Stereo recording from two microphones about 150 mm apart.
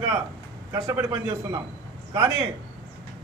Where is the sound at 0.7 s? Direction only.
15° right (ahead or behind).